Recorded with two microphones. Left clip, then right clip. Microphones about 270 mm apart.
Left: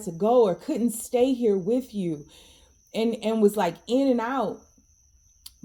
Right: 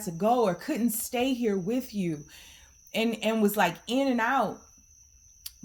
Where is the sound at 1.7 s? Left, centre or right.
Right.